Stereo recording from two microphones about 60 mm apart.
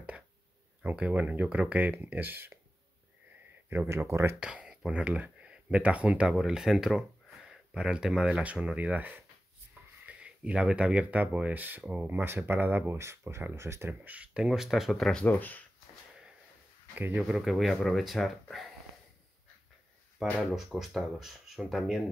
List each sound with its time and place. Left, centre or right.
0.9 s speech: right
3.9 s speech: right
4.4 s speech: centre
5.0 s speech: right
10.0 s speech: centre; by 12.9 s right
12.9 s speech: right
14.0 s speech: right
14.4 s speech: centre
15.2 s speech: left
16.9 s speech: right
17.4 s speech: centre
20.2 s speech: centre